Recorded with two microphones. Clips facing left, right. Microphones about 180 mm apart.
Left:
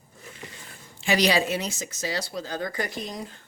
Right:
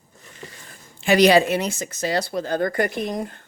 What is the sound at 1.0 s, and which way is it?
Speech, 55° right (ahead or behind).